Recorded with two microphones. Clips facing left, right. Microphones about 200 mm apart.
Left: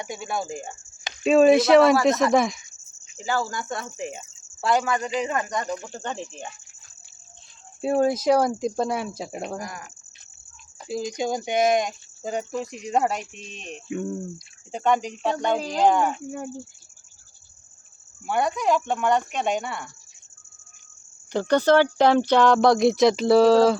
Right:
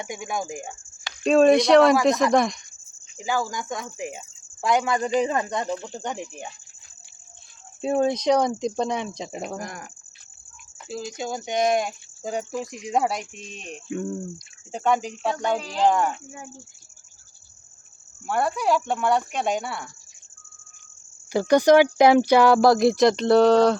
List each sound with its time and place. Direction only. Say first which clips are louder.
0.0 s speech: even; 15° right (ahead or behind)
1.2 s speech: even; 5° left (ahead or behind)
3.2 s cricket: even; 15° right (ahead or behind)
5.2 s speech: right 2 dB; 30° right (ahead or behind)
5.8 s speech: right 1 dB; 15° right (ahead or behind)
7.8 s speech: left 1 dB; 5° left (ahead or behind)
10.8 s speech: left 4 dB; 15° left (ahead or behind); by 13.7 s 10° right (ahead or behind)
13.9 s speech: even; centre (ahead or behind)
14.7 s speech: even; 10° right (ahead or behind)
18.3 s speech: even; 5° right (ahead or behind)
21.3 s speech: right 3 dB; 10° right (ahead or behind)